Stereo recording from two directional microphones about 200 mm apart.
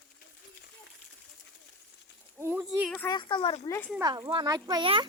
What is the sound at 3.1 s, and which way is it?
Speech, 25° left (ahead or behind).